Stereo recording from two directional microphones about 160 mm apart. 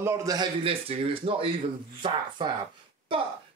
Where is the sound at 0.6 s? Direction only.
35° right (ahead or behind).